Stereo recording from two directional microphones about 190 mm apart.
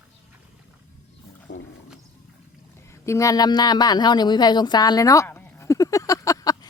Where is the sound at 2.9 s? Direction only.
15° left (ahead or behind).